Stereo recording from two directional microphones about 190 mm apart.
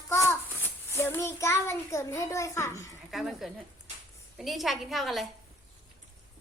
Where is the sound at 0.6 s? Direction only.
15° left (ahead or behind).